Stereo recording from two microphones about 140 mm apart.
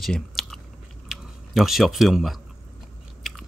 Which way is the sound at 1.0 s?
Centre (ahead or behind).